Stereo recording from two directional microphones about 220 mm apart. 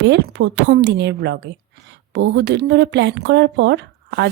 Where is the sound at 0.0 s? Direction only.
55° right (ahead or behind).